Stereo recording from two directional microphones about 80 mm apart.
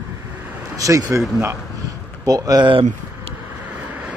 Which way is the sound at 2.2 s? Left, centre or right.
Right.